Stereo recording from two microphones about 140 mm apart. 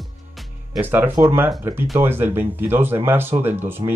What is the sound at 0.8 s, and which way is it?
Speech, 15° right (ahead or behind).